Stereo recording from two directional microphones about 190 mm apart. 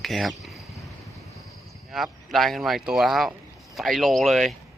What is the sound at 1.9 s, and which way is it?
Speech, centre (ahead or behind).